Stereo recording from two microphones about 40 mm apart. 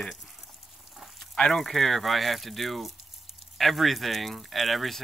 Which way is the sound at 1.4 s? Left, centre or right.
Centre.